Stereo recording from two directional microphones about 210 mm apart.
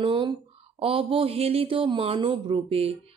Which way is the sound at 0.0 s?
25° right (ahead or behind).